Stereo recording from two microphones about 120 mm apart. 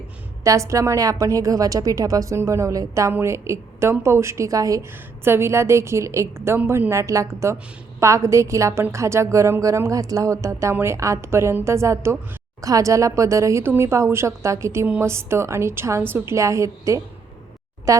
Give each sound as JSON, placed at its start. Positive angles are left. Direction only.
{"t": 0.4, "sound": "a woman's voice", "side_deg": -25}